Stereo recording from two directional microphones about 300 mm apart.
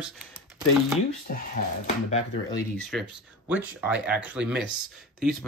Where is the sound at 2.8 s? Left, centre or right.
Centre.